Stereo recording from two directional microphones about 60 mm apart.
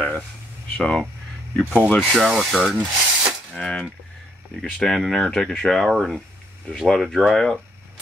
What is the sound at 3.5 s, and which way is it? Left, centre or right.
Speech, centre.